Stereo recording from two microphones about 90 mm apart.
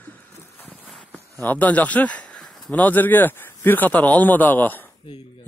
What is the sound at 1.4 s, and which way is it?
Speech, 20° left (ahead or behind).